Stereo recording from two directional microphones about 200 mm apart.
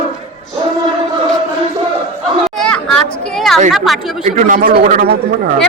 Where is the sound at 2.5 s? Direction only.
5° left (ahead or behind).